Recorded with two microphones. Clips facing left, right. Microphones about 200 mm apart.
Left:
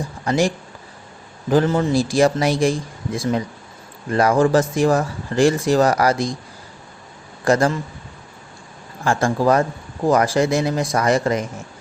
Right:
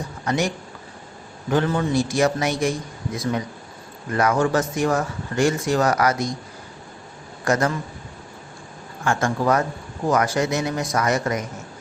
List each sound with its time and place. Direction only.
0.3 s speech: 30° left (ahead or behind)
4.1 s speech: 30° left (ahead or behind)
7.4 s speech: 30° left (ahead or behind)
9.0 s speech: 35° left (ahead or behind)